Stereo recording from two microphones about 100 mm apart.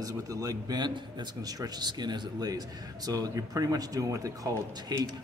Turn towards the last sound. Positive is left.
turn(degrees=-45)  # may be behind; listen again after turning